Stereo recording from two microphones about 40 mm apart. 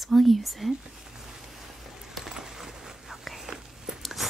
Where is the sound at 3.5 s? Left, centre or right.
Centre.